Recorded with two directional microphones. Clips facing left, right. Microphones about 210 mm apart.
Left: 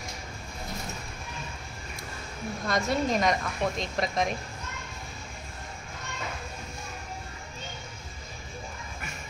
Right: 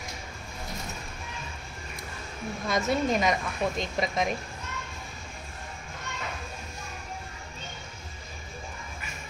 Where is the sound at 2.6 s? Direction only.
Centre (ahead or behind).